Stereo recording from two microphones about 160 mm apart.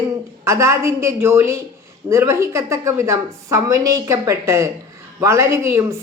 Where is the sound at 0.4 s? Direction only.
20° right (ahead or behind).